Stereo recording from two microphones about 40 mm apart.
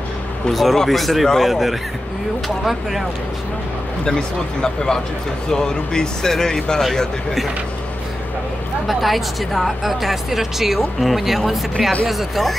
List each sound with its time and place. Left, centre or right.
0.5 s a woman's voice: centre
4.0 s speech: centre
8.8 s a woman's voice: centre